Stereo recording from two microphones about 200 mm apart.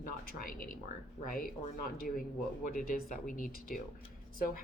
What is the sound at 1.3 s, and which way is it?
Speech, 45° left (ahead or behind).